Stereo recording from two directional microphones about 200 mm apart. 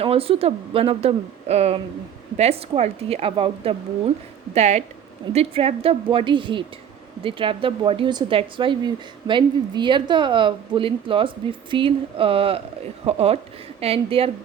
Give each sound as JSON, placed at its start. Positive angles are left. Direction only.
{"t": 0.0, "sound": "a woman's voice", "side_deg": -30}